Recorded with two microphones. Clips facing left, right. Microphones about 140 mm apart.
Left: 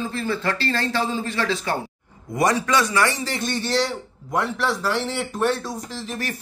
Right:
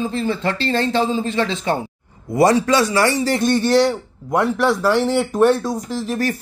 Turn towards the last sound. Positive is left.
turn(degrees=-45)  # may be behind; listen again after turning